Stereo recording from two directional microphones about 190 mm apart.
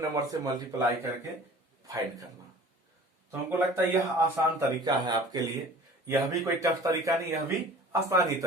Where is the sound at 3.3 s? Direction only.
10° right (ahead or behind).